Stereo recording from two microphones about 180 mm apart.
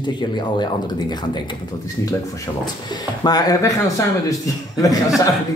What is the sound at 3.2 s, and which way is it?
Speech, 20° left (ahead or behind).